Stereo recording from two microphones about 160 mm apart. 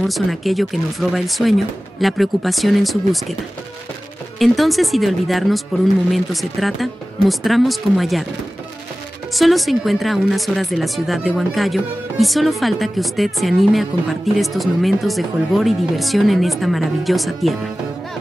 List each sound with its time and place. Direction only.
0.0 s speech: centre (ahead or behind)
4.4 s speech: centre (ahead or behind)
9.3 s speech: centre (ahead or behind)